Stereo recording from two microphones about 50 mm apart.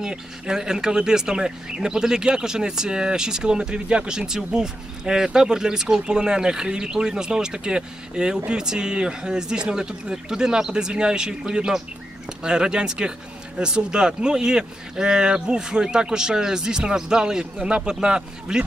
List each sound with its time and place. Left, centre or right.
0.0 s speech: centre